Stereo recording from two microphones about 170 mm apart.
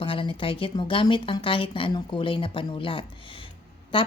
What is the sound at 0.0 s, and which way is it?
Speech, 30° left (ahead or behind).